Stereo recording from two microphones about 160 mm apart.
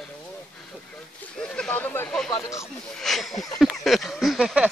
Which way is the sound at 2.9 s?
Centre (ahead or behind).